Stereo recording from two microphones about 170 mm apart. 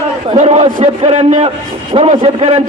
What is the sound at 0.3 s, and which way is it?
A man's voice, 40° right (ahead or behind).